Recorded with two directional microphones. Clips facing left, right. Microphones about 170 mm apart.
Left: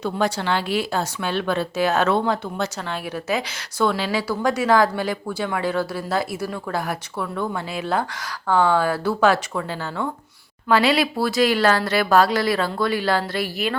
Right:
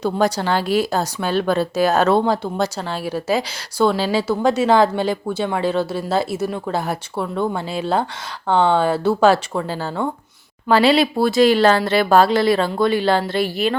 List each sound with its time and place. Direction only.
0.0 s a woman's voice: 40° right (ahead or behind)